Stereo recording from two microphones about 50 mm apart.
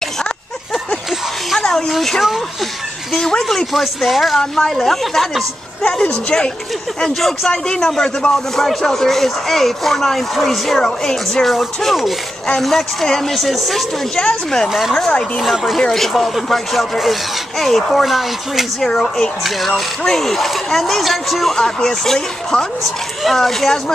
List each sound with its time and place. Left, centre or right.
1.6 s a sound: centre
1.9 s a man's voice: centre
5.8 s a man's voice: centre
14.1 s a man's voice: centre
14.7 s speech: centre
15.0 s a man's voice: centre
15.5 s a man's voice: centre
21.5 s a man's voice: centre